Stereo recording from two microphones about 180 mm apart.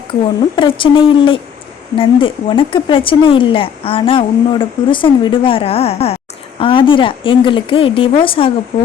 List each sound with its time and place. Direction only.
0.1 s speech: 25° left (ahead or behind)